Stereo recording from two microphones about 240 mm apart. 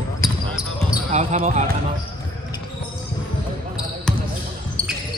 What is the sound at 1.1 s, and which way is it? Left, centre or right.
Speech, right.